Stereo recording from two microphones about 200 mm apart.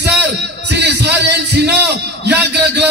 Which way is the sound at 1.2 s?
55° right (ahead or behind).